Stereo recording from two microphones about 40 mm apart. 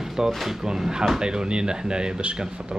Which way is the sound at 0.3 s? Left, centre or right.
Centre.